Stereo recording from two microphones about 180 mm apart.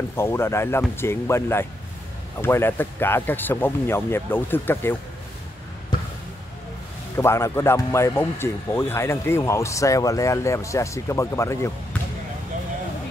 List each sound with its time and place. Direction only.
0.1 s speech: 15° left (ahead or behind)
5.9 s basketball bounce: 25° left (ahead or behind)
7.2 s speech: 15° left (ahead or behind)